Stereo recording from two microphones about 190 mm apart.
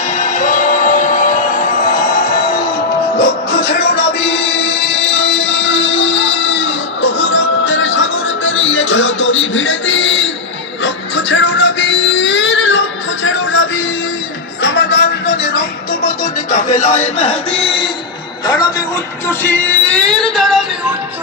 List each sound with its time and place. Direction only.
0.1 s music: 40° left (ahead or behind); by 12.8 s 75° left (ahead or behind)
13.2 s music: 90° left
14.6 s music: 70° left (ahead or behind); by 17.9 s 25° left (ahead or behind)
18.4 s speech: 20° left (ahead or behind)
19.3 s music: 10° left (ahead or behind)